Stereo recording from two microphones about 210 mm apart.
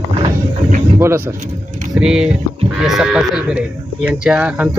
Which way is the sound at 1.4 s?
35° right (ahead or behind).